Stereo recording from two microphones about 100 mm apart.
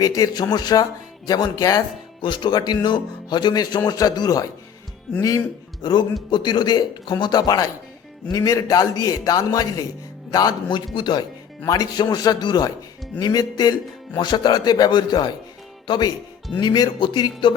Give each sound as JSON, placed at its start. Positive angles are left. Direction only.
{"t": 0.0, "sound": "a man's voice", "side_deg": 40}
{"t": 2.2, "sound": "a man's voice", "side_deg": 50}
{"t": 5.8, "sound": "a man's voice", "side_deg": 45}